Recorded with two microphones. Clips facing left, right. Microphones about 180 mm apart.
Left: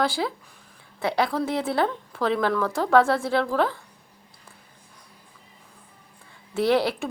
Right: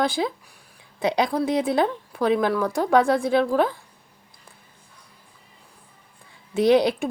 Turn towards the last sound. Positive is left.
turn(degrees=-20)  # may be behind; listen again after turning